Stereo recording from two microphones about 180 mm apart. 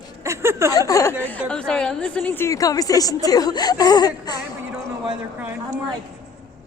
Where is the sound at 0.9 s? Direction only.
15° left (ahead or behind).